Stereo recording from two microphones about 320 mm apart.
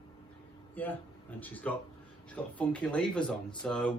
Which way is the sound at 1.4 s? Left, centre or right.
Centre.